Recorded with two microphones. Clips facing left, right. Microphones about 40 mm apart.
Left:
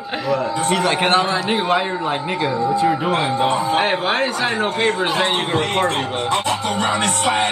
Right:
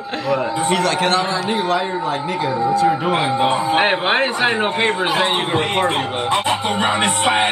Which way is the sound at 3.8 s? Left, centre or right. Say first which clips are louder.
Right 2 dB; right.